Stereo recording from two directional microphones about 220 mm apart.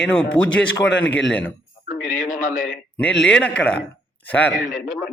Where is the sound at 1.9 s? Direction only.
40° left (ahead or behind).